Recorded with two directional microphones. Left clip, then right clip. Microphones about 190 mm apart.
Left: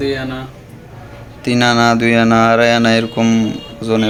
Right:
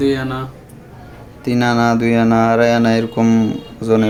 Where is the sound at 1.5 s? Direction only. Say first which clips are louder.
Left 3 dB; 5° right (ahead or behind).